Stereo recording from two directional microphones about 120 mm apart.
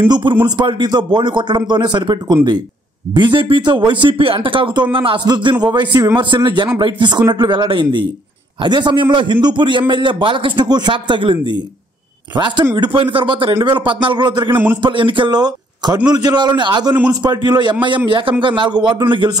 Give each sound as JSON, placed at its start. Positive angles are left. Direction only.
{"t": 0.1, "sound": "a man's voice", "side_deg": -40}
{"t": 14.5, "sound": "a man's voice", "side_deg": -20}
{"t": 14.8, "sound": "a man's voice", "side_deg": -45}